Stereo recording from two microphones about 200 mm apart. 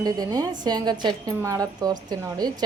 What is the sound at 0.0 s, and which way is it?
A woman's voice, 20° right (ahead or behind).